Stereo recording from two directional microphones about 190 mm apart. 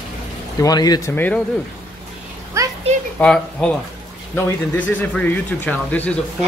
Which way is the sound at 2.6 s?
15° right (ahead or behind).